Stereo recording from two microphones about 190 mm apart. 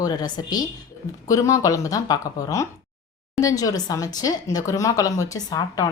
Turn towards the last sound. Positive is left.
turn(degrees=20)  # may be behind; listen again after turning